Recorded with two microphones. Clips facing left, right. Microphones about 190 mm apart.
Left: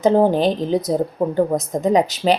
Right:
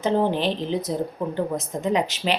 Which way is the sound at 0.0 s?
40° left (ahead or behind).